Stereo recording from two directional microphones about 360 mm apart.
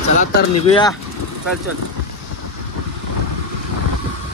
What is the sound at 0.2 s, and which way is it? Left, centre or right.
Speech, centre.